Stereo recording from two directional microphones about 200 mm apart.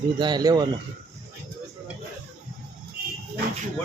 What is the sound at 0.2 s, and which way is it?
Speech, 20° right (ahead or behind).